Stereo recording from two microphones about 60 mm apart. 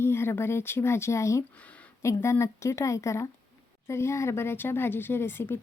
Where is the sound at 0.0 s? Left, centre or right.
Left.